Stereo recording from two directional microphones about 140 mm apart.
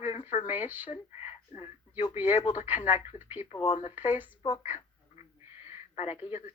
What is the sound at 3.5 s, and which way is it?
Speech, 40° left (ahead or behind).